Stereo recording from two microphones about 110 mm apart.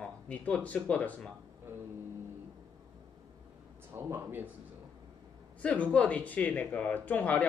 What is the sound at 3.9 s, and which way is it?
Speech, 20° right (ahead or behind).